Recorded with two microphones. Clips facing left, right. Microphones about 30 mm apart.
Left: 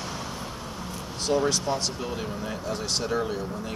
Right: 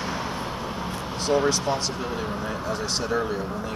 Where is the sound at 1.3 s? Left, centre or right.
Centre.